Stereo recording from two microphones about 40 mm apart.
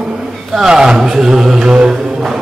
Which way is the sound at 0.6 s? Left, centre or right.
Centre.